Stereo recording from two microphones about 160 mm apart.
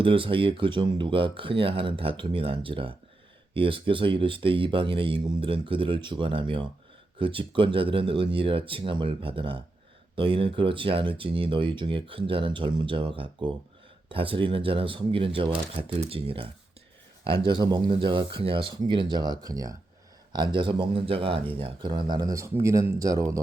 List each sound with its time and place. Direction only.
0.0 s speech: 35° right (ahead or behind)